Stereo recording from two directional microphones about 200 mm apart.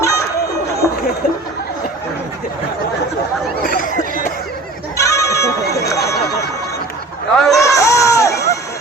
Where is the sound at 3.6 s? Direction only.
45° left (ahead or behind).